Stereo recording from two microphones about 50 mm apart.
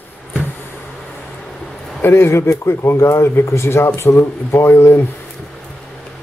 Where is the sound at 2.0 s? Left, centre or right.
Left.